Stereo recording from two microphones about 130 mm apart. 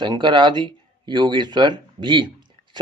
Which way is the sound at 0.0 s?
35° right (ahead or behind).